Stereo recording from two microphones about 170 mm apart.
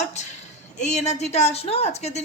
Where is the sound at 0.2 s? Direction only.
40° left (ahead or behind).